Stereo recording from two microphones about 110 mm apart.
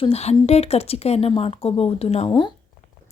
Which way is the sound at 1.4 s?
60° left (ahead or behind).